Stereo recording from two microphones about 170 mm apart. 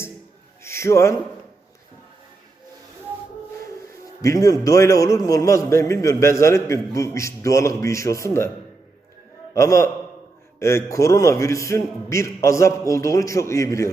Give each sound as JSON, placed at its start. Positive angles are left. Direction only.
{"t": 0.6, "sound": "a sound", "side_deg": 15}
{"t": 4.2, "sound": "a man's voice", "side_deg": 20}
{"t": 9.6, "sound": "a man's voice", "side_deg": 20}